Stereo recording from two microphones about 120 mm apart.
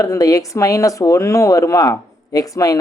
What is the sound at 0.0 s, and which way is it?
Speech, 30° left (ahead or behind).